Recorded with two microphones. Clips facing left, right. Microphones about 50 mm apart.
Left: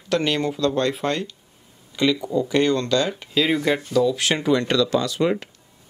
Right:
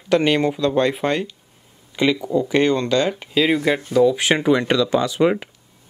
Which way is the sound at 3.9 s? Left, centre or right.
Right.